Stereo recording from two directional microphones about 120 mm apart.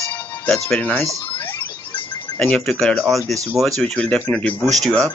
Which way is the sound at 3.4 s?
25° right (ahead or behind).